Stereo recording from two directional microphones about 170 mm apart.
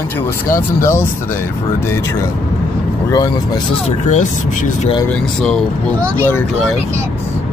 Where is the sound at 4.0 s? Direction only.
45° left (ahead or behind).